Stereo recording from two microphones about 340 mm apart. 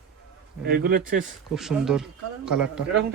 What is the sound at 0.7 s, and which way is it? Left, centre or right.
Speech, right.